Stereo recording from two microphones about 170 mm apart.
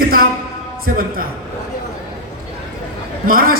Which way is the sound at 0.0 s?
60° right (ahead or behind).